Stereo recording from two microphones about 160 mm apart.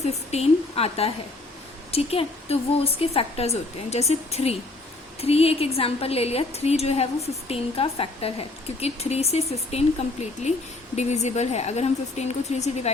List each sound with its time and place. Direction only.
0.0 s a woman's voice: 40° left (ahead or behind)